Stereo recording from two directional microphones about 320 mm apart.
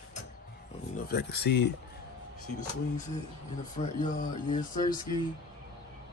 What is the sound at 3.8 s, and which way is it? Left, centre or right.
Speech, left.